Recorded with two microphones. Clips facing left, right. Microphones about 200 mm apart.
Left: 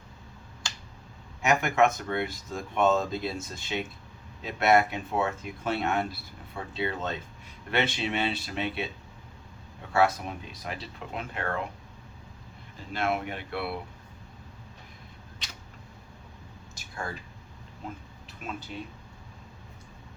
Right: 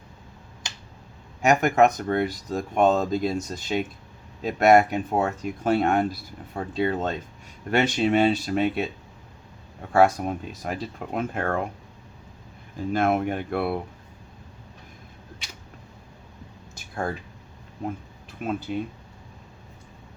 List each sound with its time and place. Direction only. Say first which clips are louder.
1.4 s speech: right 5 dB; 45° right (ahead or behind)
9.9 s speech: right 6 dB; 45° right (ahead or behind)
12.7 s speech: right 7 dB; 50° right (ahead or behind)
16.7 s a sound: right 8 dB; 55° right (ahead or behind)